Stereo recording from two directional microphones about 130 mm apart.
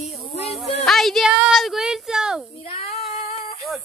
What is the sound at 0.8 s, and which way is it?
Speech, centre (ahead or behind).